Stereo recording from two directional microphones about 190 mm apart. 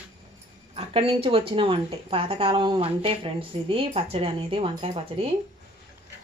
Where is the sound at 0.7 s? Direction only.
30° right (ahead or behind).